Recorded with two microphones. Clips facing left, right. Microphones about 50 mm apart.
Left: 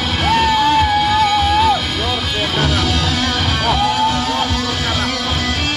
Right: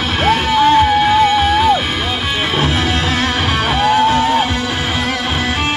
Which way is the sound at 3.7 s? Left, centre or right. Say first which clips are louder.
Right 3 dB; right.